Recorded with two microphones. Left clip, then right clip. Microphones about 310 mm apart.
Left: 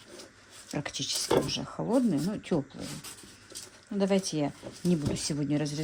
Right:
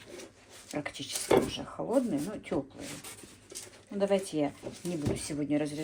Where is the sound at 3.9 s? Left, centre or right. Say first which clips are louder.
Even; left.